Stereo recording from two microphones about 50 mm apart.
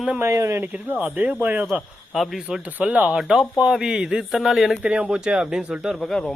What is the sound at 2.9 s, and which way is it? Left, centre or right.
Speech, right.